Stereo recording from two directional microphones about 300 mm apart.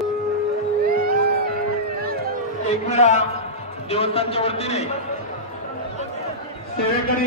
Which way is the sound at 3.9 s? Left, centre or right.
Centre.